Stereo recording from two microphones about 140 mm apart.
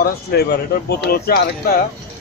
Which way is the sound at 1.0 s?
90° left.